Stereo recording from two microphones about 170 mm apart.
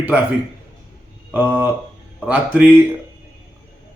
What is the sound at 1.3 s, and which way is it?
A man's voice, 10° right (ahead or behind).